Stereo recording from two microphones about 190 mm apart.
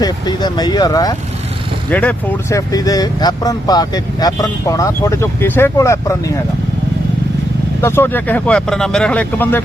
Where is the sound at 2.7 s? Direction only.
20° left (ahead or behind).